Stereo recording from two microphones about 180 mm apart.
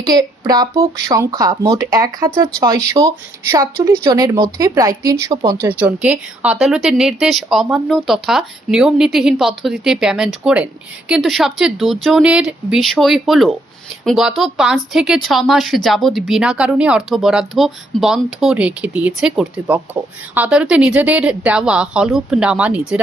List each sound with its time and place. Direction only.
0.1 s speech: 20° right (ahead or behind)
5.6 s speech: 10° right (ahead or behind)